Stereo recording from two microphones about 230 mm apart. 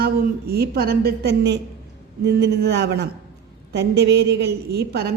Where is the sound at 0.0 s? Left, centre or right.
Right.